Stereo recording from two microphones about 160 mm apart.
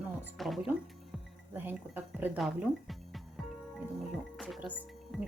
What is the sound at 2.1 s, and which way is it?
A woman's voice, 10° right (ahead or behind).